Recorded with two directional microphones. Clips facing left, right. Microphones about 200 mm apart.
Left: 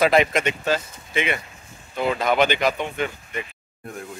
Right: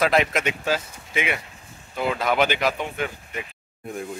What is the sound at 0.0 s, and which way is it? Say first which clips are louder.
Speech: left 3 dB; centre (ahead or behind).